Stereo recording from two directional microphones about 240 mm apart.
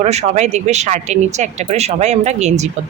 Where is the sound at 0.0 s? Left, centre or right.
Right.